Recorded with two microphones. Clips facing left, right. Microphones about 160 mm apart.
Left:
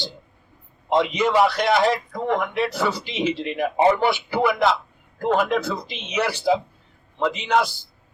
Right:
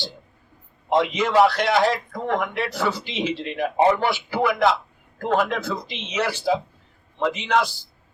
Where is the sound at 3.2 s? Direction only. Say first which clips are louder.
Left 2 dB; 15° left (ahead or behind).